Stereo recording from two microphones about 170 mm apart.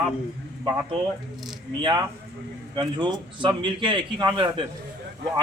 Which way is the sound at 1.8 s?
25° right (ahead or behind).